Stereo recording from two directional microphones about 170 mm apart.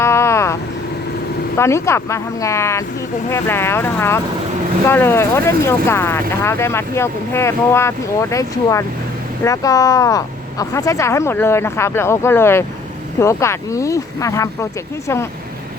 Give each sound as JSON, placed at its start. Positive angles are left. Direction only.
{"t": 0.0, "sound": "vehicle", "side_deg": 15}
{"t": 1.5, "sound": "speech", "side_deg": 15}